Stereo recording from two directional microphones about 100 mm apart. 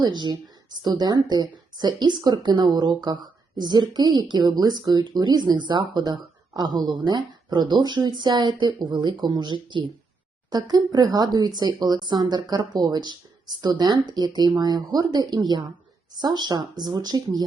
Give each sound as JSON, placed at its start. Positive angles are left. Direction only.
{"t": 0.0, "sound": "speech", "side_deg": -45}
{"t": 10.5, "sound": "speech", "side_deg": -40}